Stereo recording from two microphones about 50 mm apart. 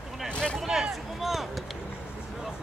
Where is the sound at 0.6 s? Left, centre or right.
Centre.